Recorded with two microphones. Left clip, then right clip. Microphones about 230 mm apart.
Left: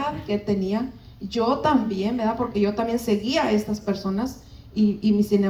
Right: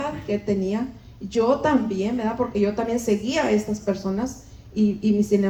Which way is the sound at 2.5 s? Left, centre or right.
Left.